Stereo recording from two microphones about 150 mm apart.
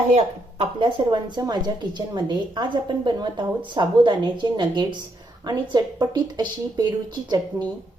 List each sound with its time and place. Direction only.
0.6 s a woman's voice: 35° right (ahead or behind)